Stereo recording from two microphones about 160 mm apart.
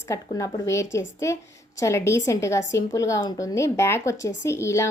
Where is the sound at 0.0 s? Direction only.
20° left (ahead or behind).